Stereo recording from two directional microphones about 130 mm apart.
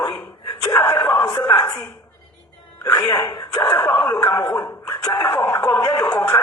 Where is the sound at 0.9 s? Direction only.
35° left (ahead or behind).